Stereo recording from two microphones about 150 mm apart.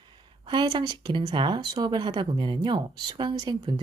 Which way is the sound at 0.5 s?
30° right (ahead or behind).